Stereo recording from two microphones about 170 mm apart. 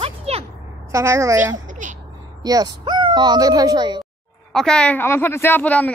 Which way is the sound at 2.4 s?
20° right (ahead or behind).